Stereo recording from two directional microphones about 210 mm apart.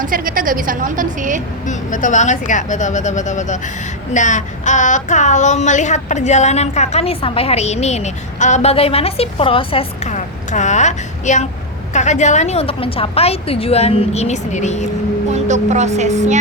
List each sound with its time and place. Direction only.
0.0 s a woman's voice: 40° right (ahead or behind)
1.6 s child singing: 35° left (ahead or behind)
15.3 s speech: 35° right (ahead or behind)